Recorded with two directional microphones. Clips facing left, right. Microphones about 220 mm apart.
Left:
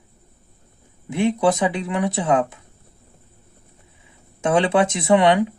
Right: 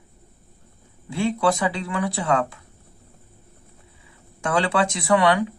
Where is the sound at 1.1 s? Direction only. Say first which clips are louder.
Left 3 dB; 20° left (ahead or behind).